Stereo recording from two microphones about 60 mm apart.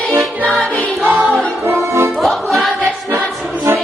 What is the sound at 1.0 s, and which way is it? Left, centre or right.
Music, right.